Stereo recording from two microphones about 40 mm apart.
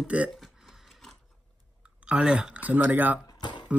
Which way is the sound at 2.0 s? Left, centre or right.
Right.